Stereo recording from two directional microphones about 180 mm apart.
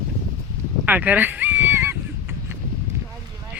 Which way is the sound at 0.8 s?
10° right (ahead or behind).